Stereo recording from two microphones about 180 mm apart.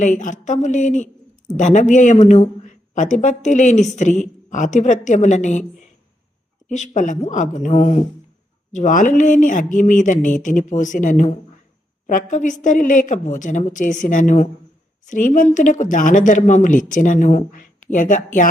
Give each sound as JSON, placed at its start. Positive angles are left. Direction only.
{"t": 0.0, "sound": "speech", "side_deg": 45}
{"t": 6.7, "sound": "speech", "side_deg": 40}